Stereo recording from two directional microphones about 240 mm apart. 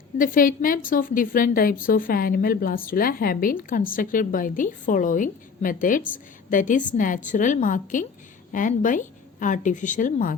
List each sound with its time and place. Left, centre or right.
0.2 s a woman's voice: left